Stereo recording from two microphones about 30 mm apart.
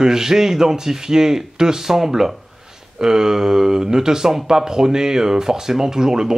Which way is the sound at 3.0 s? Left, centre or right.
Centre.